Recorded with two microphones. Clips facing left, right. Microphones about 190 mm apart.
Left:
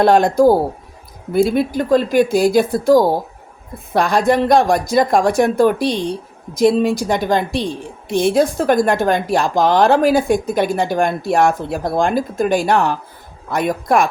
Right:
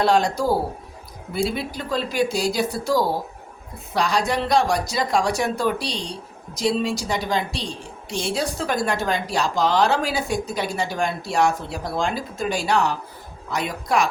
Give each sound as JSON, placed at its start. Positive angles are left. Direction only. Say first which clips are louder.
{"t": 0.0, "sound": "a woman's voice", "louder": "left 8 dB", "side_deg": 55}